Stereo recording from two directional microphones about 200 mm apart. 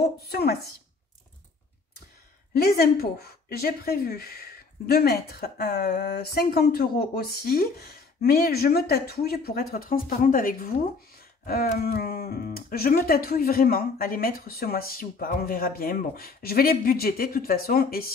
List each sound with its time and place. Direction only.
0.0 s speech: 55° left (ahead or behind)
2.8 s speech: 50° left (ahead or behind)